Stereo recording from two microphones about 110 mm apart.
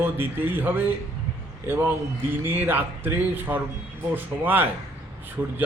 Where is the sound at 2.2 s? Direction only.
20° right (ahead or behind).